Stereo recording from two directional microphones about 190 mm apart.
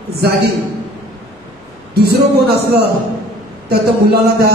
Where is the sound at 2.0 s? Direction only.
55° right (ahead or behind).